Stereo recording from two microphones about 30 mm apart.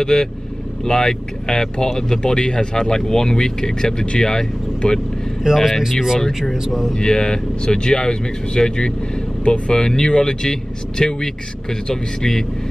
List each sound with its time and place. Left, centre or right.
0.0 s speech: centre
5.4 s speech: centre
5.8 s speech: centre
6.1 s a man's voice: centre
6.7 s speech: centre
7.0 s a man's voice: left